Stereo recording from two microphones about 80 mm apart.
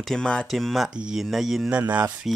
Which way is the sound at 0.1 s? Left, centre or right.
Centre.